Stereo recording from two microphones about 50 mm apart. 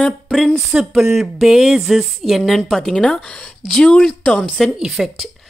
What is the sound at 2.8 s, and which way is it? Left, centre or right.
Speech, centre.